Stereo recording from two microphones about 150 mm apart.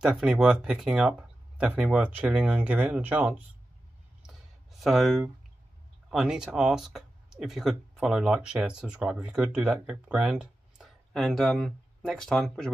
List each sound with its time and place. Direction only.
0.0 s speech: 5° right (ahead or behind)
4.3 s a sound: centre (ahead or behind)
6.0 s speech: 5° right (ahead or behind)